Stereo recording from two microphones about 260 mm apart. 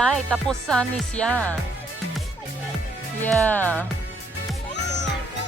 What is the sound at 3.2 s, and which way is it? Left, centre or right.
Music, centre.